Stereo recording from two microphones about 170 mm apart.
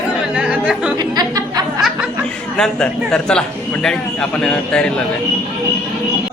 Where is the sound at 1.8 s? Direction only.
Centre (ahead or behind).